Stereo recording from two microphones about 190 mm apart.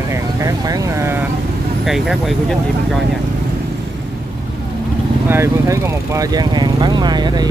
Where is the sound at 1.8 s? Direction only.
Centre (ahead or behind).